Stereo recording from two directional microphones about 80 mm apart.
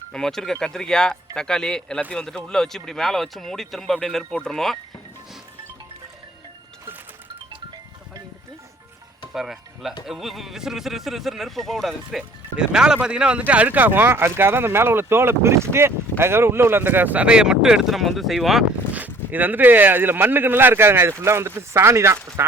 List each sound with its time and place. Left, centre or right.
0.1 s speech: centre
9.3 s speech: centre
18.9 s speech: right